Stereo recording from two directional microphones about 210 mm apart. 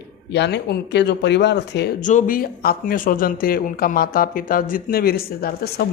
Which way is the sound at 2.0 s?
40° left (ahead or behind).